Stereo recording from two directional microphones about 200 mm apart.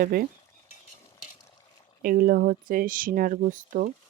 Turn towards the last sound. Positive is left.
turn(degrees=-40)  # may be behind; listen again after turning